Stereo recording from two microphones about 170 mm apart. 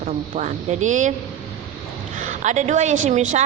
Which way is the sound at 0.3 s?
45° right (ahead or behind).